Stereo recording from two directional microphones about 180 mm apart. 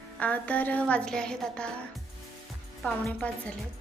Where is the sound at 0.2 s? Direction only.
10° left (ahead or behind).